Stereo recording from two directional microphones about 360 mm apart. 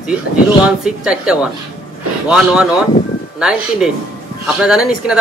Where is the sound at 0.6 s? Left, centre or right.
Centre.